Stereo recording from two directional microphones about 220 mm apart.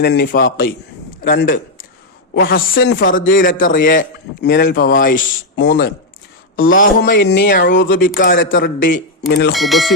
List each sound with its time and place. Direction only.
0.0 s a man's voice: 50° left (ahead or behind)
5.5 s speech: 50° left (ahead or behind)
6.7 s speech: 40° left (ahead or behind)
7.7 s speech: 40° left (ahead or behind)
9.6 s speech: centre (ahead or behind)